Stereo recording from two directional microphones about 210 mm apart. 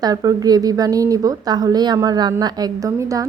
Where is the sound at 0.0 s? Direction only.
15° right (ahead or behind).